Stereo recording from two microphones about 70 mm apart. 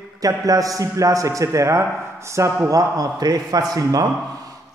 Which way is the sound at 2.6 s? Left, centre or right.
Right.